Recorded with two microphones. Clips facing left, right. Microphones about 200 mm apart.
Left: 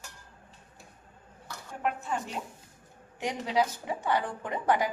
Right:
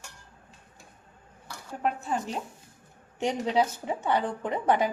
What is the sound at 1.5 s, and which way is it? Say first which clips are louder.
A woman's voice: right 2 dB; 35° right (ahead or behind).